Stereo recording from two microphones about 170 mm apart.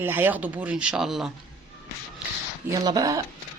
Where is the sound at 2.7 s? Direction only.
20° right (ahead or behind).